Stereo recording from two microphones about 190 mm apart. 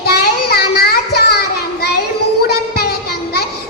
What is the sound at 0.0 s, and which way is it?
Child singing, 55° left (ahead or behind).